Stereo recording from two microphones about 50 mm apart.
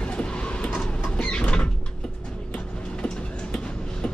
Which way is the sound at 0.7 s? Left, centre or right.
Centre.